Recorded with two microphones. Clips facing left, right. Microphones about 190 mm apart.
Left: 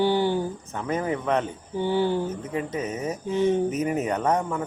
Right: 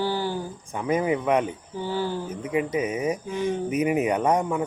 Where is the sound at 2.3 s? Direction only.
10° right (ahead or behind).